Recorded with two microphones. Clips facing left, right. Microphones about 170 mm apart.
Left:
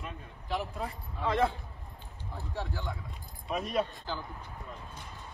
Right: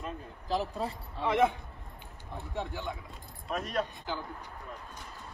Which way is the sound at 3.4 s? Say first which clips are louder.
Left 2 dB; centre (ahead or behind).